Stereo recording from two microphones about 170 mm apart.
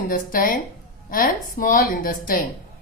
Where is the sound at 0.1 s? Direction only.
55° left (ahead or behind).